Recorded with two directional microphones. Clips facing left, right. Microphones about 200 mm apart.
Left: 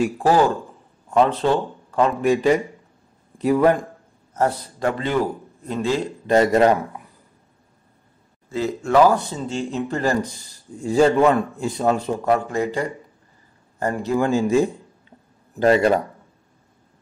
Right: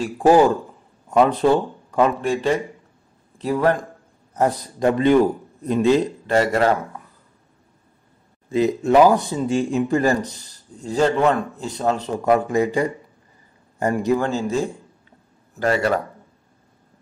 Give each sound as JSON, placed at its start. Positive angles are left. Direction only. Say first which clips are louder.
{"t": 0.2, "sound": "a man's voice", "louder": "right 6 dB", "side_deg": -15}
{"t": 2.2, "sound": "a man's voice", "louder": "left 3 dB", "side_deg": 10}
{"t": 4.3, "sound": "a man's voice", "louder": "right 1 dB", "side_deg": -15}
{"t": 6.2, "sound": "speech", "louder": "left 6 dB", "side_deg": 20}
{"t": 8.5, "sound": "a man's voice", "louder": "right 5 dB", "side_deg": -20}
{"t": 10.8, "sound": "a man's voice", "louder": "left 3 dB", "side_deg": 10}
{"t": 12.3, "sound": "a man's voice", "louder": "right 4 dB", "side_deg": -15}
{"t": 14.2, "sound": "a man's voice", "louder": "left 4 dB", "side_deg": 15}
{"t": 15.6, "sound": "speech", "louder": "left 4 dB", "side_deg": 20}